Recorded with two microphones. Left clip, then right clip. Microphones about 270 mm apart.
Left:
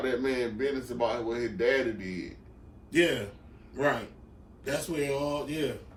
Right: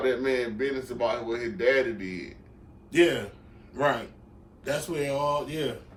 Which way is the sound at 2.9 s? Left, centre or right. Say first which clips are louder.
Right 3 dB; centre.